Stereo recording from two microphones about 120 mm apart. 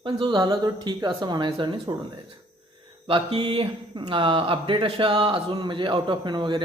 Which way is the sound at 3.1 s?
45° right (ahead or behind).